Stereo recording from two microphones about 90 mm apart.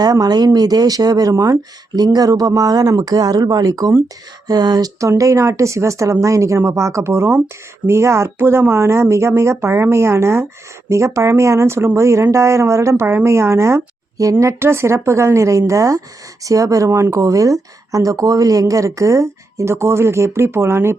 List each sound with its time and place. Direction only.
0.0 s speech: 45° right (ahead or behind); by 20.9 s 30° right (ahead or behind)